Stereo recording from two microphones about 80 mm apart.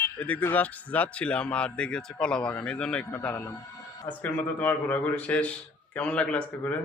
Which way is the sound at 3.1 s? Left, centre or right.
Left.